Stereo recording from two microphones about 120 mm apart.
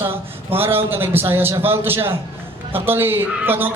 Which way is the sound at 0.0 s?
20° right (ahead or behind).